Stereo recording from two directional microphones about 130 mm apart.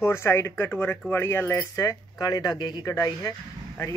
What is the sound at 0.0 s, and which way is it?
Speech, 20° left (ahead or behind).